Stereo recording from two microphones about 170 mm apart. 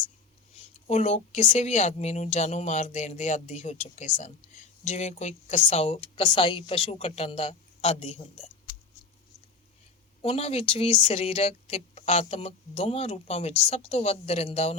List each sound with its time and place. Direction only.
0.6 s speech: 40° left (ahead or behind)
10.2 s speech: 35° left (ahead or behind)